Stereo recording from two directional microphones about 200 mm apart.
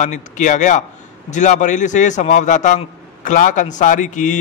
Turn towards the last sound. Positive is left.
turn(degrees=40)  # may be behind; listen again after turning